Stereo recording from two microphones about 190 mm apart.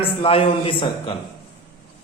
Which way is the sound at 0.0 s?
30° left (ahead or behind).